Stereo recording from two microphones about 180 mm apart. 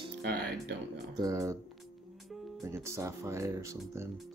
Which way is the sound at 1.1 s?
20° right (ahead or behind).